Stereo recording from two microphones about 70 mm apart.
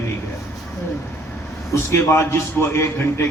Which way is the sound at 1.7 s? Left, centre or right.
Left.